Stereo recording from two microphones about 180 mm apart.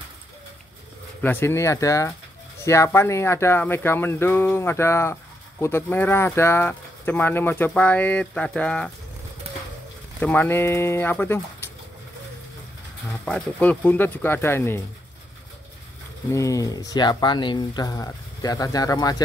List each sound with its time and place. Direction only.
1.2 s speech: 10° left (ahead or behind)
9.5 s pigeon: 35° right (ahead or behind)
10.2 s speech: 10° left (ahead or behind)
13.2 s speech: 5° left (ahead or behind)
16.3 s speech: 20° left (ahead or behind)